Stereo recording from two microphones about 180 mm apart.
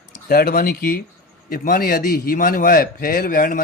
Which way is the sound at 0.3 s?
55° left (ahead or behind).